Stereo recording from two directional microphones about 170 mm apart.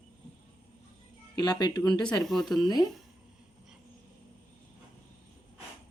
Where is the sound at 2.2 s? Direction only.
Centre (ahead or behind).